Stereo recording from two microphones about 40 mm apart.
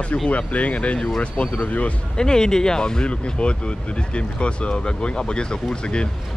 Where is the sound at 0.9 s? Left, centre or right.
Centre.